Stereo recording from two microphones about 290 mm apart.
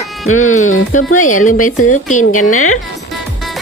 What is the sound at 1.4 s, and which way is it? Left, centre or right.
A woman's voice, left.